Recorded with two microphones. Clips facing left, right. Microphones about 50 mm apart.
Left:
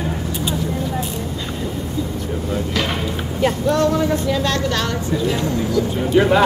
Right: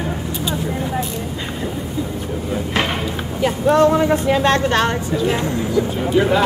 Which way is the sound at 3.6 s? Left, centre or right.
Right.